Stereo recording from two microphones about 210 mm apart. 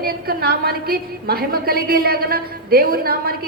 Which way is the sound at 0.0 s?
45° right (ahead or behind).